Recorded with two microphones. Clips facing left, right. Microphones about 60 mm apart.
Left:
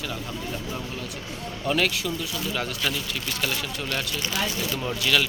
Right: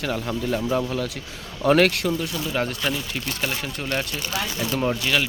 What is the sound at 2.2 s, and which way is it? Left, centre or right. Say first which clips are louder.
Speech: right 4 dB; right.